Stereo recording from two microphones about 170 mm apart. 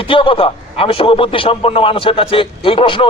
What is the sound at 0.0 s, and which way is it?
A man's voice, 30° left (ahead or behind).